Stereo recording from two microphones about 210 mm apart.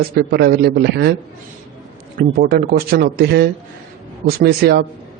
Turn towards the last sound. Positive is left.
turn(degrees=-50)  # may be behind; listen again after turning